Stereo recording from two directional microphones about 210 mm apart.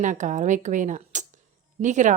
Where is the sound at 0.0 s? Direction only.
35° right (ahead or behind).